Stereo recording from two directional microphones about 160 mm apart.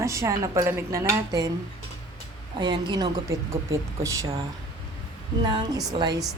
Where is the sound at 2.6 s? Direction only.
30° right (ahead or behind).